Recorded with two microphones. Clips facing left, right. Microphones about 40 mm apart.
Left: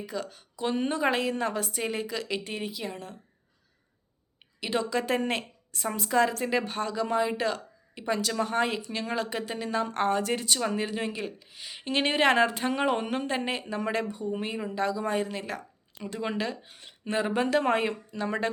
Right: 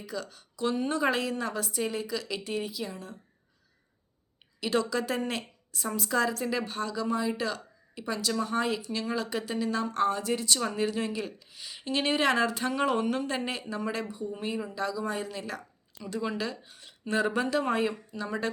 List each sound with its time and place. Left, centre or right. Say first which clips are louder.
0.0 s speech: left 2 dB; left
4.6 s a woman's voice: even; left
13.7 s speech: left 4 dB; left
14.8 s speech: left 7 dB; left
17.1 s speech: right 1 dB; centre
17.3 s speech: left 3 dB; left
18.1 s speech: left 4 dB; left